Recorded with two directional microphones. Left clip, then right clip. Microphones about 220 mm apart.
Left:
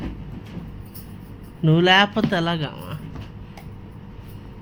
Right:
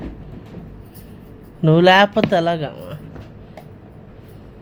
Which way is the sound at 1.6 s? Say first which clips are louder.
Right 4 dB; 20° right (ahead or behind).